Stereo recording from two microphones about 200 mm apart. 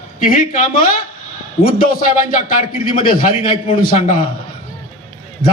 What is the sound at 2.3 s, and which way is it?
A man's voice, 45° left (ahead or behind).